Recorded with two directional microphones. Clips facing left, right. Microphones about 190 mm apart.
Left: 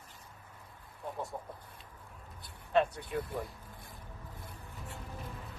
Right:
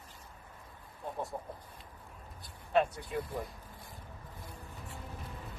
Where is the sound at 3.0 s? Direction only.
60° left (ahead or behind).